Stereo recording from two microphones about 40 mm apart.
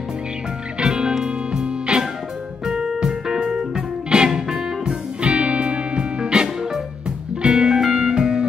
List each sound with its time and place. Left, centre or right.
0.7 s music: right
4.8 s music: right